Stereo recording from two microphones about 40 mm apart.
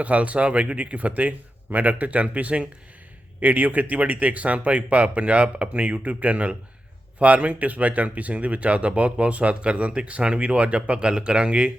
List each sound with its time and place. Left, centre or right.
0.0 s speech: right